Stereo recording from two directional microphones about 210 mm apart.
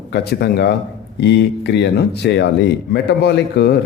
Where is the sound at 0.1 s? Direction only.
50° left (ahead or behind).